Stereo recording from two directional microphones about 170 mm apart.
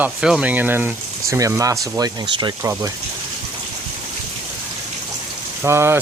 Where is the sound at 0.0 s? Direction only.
5° right (ahead or behind); by 2.9 s 20° right (ahead or behind).